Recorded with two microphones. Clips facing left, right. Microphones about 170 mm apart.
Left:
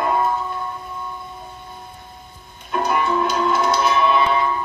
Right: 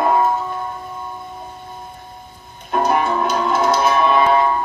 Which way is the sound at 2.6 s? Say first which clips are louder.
Right 3 dB; 50° right (ahead or behind).